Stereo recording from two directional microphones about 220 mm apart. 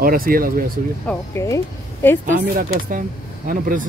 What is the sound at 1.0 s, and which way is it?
Speech, 10° left (ahead or behind).